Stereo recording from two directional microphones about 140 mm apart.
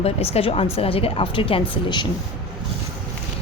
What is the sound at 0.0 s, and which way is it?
A woman's voice, 45° left (ahead or behind).